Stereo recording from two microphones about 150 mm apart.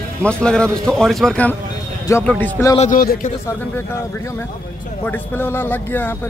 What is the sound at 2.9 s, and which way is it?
Speech, 70° left (ahead or behind).